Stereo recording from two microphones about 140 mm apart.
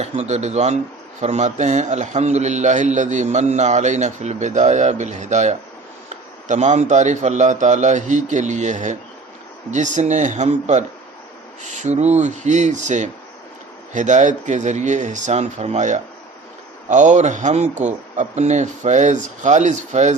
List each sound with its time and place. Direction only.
0.0 s a man's voice: 55° right (ahead or behind)